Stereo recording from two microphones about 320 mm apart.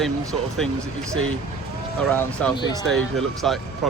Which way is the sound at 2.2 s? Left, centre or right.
Centre.